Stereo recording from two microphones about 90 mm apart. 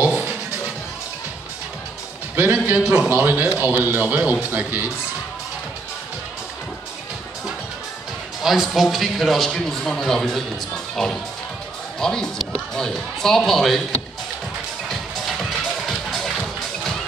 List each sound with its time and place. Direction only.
0.0 s music: 10° right (ahead or behind)
2.3 s speech: 20° right (ahead or behind)
8.4 s a man's voice: 5° right (ahead or behind)
14.9 s music: centre (ahead or behind)